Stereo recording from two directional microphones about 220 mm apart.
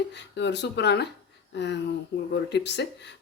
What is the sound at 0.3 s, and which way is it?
Speech, 50° left (ahead or behind).